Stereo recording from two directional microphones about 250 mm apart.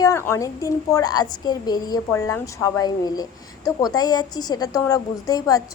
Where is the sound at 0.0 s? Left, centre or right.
Centre.